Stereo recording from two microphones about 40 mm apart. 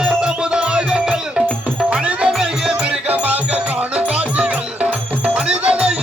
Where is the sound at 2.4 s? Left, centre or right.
Centre.